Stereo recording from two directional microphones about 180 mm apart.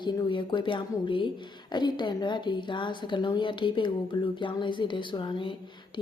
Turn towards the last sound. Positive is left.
turn(degrees=25)  # may be behind; listen again after turning